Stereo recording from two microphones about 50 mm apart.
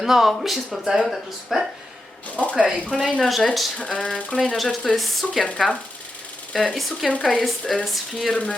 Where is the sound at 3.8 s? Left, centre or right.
Left.